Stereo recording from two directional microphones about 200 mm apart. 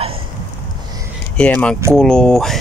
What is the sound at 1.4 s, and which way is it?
Speech, 5° left (ahead or behind).